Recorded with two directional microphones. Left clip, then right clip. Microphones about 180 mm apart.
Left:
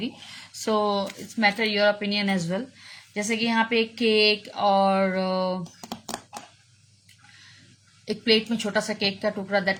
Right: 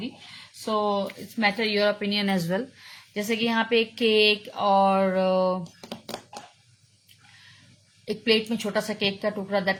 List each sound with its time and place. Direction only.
0.0 s speech: 25° left (ahead or behind)
1.4 s speech: centre (ahead or behind); by 2.6 s 15° right (ahead or behind)
2.8 s speech: centre (ahead or behind)
8.0 s speech: 5° left (ahead or behind)